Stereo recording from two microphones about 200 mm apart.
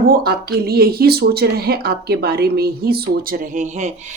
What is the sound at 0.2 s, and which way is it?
Speech, 50° right (ahead or behind).